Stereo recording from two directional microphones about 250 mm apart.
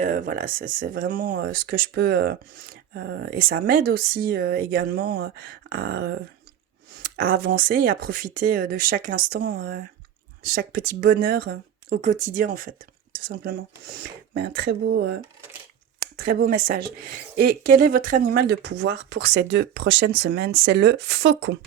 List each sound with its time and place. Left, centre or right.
0.0 s speech: right